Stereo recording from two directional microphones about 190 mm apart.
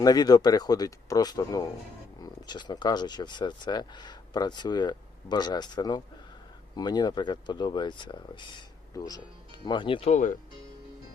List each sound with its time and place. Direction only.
0.0 s speech: 20° left (ahead or behind); by 10.3 s 40° left (ahead or behind)